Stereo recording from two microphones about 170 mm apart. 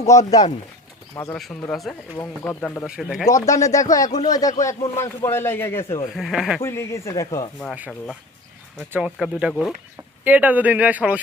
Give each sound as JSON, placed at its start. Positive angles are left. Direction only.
{"t": 0.1, "sound": "speech", "side_deg": 20}
{"t": 1.7, "sound": "speech", "side_deg": 0}
{"t": 2.1, "sound": "a man's voice", "side_deg": 15}
{"t": 2.8, "sound": "speech", "side_deg": -5}
{"t": 3.2, "sound": "a man's voice", "side_deg": 20}
{"t": 6.1, "sound": "speech", "side_deg": 0}
{"t": 6.6, "sound": "a man's voice", "side_deg": 15}
{"t": 7.7, "sound": "speech", "side_deg": 0}
{"t": 10.2, "sound": "speech", "side_deg": -10}